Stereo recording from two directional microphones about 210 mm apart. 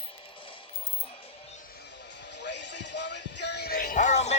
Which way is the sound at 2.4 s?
55° left (ahead or behind).